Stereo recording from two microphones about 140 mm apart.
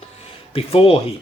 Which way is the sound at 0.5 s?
45° left (ahead or behind).